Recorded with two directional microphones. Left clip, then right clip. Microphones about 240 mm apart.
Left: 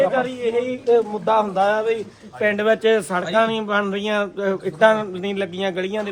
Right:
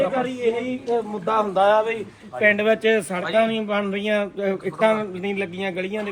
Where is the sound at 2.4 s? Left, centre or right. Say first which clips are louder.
Even; centre.